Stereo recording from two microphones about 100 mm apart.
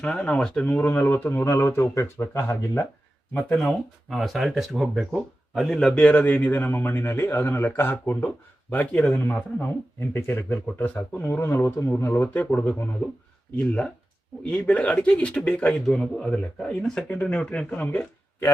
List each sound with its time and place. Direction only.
0.0 s speech: 10° left (ahead or behind)
3.3 s speech: 10° left (ahead or behind)